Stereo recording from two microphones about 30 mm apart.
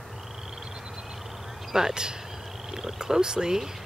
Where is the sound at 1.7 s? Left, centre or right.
Right.